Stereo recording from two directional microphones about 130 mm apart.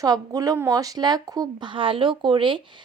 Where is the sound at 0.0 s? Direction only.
25° right (ahead or behind).